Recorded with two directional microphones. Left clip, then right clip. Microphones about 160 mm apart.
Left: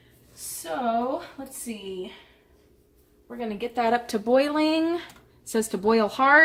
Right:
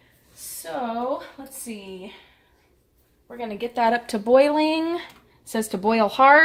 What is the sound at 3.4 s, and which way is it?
Speech, 55° right (ahead or behind).